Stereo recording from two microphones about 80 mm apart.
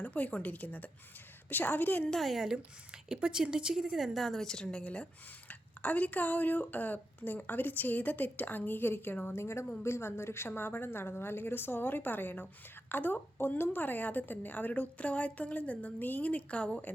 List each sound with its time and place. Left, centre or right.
0.0 s a woman's voice: centre
2.0 s a woman's voice: centre